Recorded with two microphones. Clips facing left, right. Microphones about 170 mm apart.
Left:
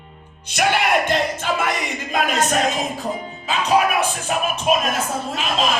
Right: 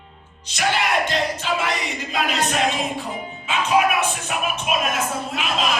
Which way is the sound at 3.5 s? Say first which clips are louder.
Left 1 dB; 35° left (ahead or behind).